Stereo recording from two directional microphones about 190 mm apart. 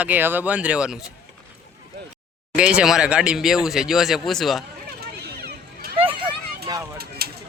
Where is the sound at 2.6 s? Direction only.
5° right (ahead or behind).